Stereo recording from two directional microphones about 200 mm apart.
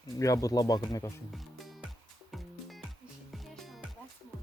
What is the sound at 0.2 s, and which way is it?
Speech, 15° left (ahead or behind).